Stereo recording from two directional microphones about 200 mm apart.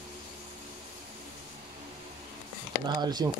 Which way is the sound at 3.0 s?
20° right (ahead or behind).